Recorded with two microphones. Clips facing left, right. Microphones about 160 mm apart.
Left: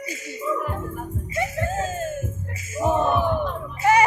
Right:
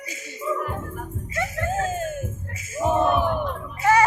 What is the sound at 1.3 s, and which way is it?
Music, 15° left (ahead or behind).